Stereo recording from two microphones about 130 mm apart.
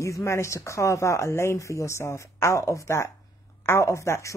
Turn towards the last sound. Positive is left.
turn(degrees=20)  # may be behind; listen again after turning